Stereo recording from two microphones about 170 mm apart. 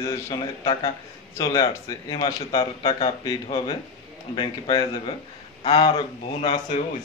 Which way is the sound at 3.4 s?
25° left (ahead or behind).